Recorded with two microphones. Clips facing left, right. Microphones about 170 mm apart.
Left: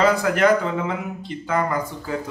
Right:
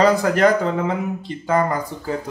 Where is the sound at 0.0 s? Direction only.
40° right (ahead or behind).